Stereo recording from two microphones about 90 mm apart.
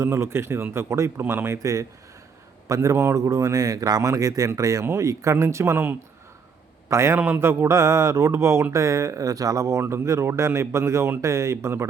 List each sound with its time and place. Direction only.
0.0 s a man's voice: 30° right (ahead or behind)